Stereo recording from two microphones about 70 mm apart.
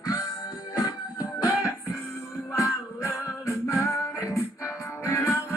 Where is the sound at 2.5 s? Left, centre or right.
Left.